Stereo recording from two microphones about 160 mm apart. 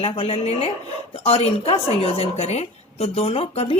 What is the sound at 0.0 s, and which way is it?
Speech, 40° left (ahead or behind).